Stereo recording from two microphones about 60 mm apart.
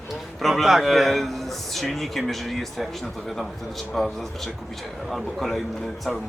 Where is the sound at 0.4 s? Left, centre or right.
Centre.